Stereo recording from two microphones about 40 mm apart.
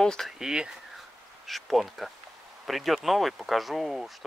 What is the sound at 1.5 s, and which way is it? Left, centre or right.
Speech, centre.